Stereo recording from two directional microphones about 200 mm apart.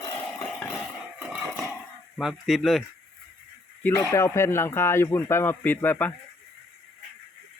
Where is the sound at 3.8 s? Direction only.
10° left (ahead or behind).